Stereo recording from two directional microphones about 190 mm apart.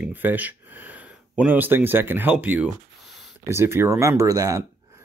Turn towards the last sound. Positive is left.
turn(degrees=-15)  # may be behind; listen again after turning